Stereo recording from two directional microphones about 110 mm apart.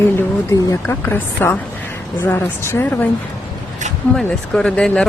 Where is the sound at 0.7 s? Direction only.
20° left (ahead or behind).